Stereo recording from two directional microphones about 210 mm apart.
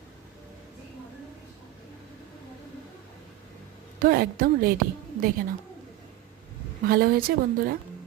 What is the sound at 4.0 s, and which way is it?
Speech, 45° right (ahead or behind).